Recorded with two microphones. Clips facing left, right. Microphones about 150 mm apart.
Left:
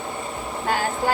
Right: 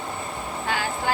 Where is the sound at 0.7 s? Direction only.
45° left (ahead or behind).